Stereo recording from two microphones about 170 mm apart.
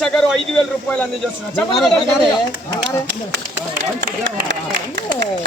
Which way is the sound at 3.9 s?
75° right (ahead or behind).